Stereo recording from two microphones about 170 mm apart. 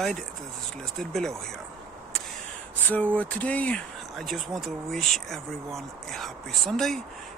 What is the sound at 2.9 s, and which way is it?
Speech, 10° left (ahead or behind).